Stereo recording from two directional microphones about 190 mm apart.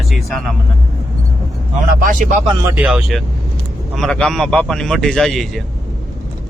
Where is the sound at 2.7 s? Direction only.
5° right (ahead or behind).